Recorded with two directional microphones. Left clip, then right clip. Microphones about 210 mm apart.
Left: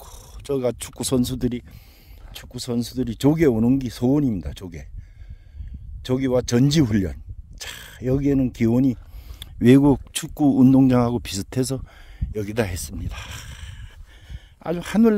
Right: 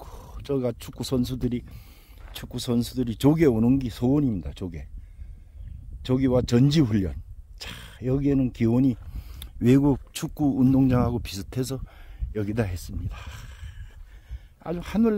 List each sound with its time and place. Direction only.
0.0 s speech: 35° left (ahead or behind)
2.3 s speech: 10° left (ahead or behind); by 4.8 s 30° left (ahead or behind)
6.0 s speech: 30° left (ahead or behind)
12.4 s speech: 45° left (ahead or behind)
14.3 s a sound: 35° left (ahead or behind)